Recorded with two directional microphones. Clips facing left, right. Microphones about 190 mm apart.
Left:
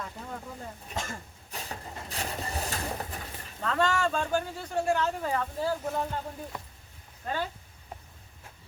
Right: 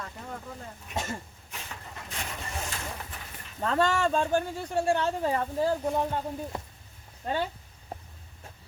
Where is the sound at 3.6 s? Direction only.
35° right (ahead or behind).